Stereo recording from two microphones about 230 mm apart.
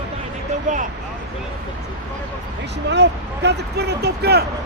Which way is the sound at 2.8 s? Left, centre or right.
Right.